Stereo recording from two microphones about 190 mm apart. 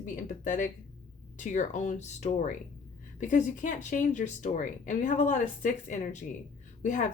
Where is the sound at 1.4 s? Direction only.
40° left (ahead or behind).